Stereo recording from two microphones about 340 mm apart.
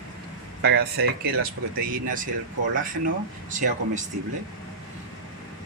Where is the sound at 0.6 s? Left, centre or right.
Right.